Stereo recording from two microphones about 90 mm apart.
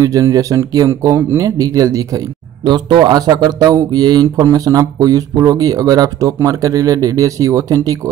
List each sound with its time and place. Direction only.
0.0 s speech: 40° right (ahead or behind)
2.6 s speech: 55° right (ahead or behind); by 8.0 s 40° right (ahead or behind)